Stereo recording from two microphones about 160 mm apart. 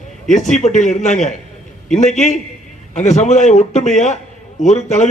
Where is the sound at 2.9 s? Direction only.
45° left (ahead or behind).